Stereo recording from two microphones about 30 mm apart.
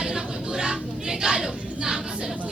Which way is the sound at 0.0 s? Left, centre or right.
Right.